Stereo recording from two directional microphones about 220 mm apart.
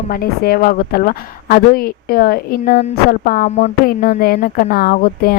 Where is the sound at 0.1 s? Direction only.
45° left (ahead or behind).